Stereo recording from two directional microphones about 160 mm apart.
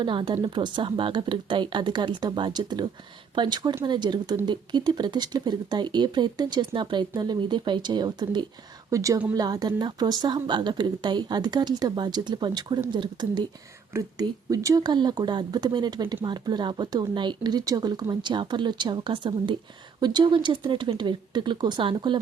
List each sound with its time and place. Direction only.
0.0 s a woman's voice: 30° right (ahead or behind)